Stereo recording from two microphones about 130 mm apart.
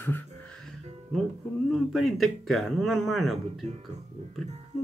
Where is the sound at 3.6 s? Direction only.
60° right (ahead or behind).